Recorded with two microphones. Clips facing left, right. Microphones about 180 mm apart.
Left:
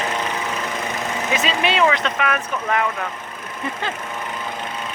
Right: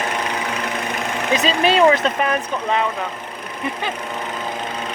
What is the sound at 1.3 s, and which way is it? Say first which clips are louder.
Speech: right 5 dB; 35° right (ahead or behind).